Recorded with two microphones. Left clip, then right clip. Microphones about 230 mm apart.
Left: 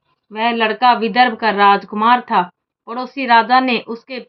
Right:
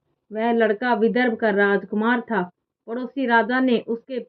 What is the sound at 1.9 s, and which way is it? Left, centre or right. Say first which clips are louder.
Speech: left 8 dB; left.